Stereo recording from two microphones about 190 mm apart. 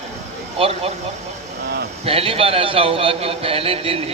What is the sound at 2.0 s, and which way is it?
A man's voice, 30° right (ahead or behind).